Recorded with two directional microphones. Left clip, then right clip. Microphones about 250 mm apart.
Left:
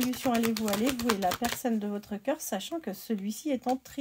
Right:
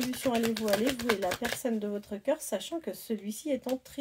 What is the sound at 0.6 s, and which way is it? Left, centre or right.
Speech, left.